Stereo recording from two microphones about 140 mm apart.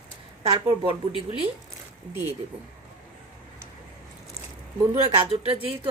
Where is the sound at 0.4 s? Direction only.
45° right (ahead or behind).